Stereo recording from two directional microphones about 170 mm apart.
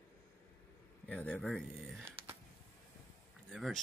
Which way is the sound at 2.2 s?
35° right (ahead or behind).